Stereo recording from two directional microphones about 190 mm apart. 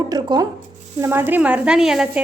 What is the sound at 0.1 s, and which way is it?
A woman's voice, 20° right (ahead or behind).